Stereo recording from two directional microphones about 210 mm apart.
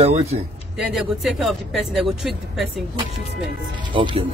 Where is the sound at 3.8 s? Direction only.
25° right (ahead or behind).